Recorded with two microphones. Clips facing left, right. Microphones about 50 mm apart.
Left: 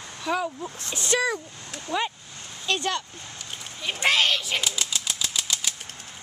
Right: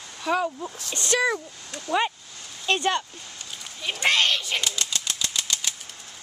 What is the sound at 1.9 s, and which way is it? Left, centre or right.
Speech, centre.